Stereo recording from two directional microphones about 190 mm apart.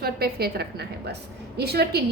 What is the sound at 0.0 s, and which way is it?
A woman's voice, 55° right (ahead or behind).